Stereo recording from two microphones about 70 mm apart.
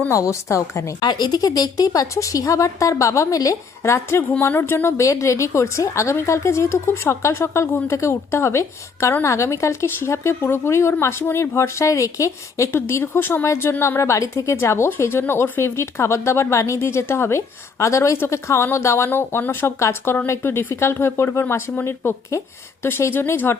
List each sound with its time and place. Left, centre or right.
0.1 s a woman's voice: left
1.0 s a woman's voice: left
4.2 s speech: left
4.9 s a woman's voice: left
12.7 s speech: left